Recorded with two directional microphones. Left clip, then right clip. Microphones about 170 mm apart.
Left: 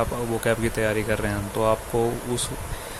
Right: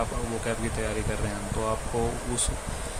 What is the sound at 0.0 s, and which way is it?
Speech, 30° left (ahead or behind).